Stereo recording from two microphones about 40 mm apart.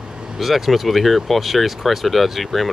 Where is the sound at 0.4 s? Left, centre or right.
Centre.